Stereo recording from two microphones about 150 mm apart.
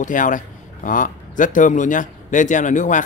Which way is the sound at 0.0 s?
60° left (ahead or behind).